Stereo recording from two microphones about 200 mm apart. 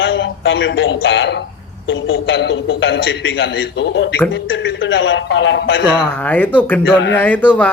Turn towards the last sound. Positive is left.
turn(degrees=5)  # may be behind; listen again after turning